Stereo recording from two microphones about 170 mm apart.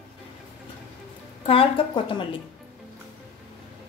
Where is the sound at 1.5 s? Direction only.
30° left (ahead or behind).